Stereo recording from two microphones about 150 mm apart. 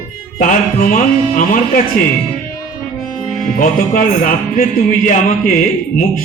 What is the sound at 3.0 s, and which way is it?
Music, centre (ahead or behind).